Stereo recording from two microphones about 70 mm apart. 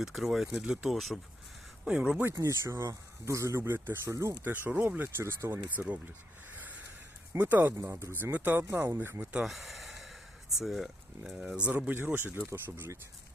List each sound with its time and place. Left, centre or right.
0.0 s speech: centre
0.9 s speech: centre
1.8 s speech: centre
2.2 s speech: right
4.8 s speech: right
5.8 s speech: right
6.5 s a sound: right
7.3 s speech: right
9.4 s speech: centre; by 12.9 s right